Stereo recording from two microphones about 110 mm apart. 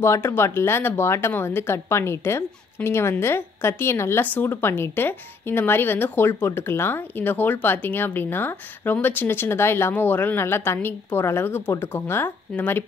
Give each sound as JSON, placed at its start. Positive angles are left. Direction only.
{"t": 0.0, "sound": "speech", "side_deg": 25}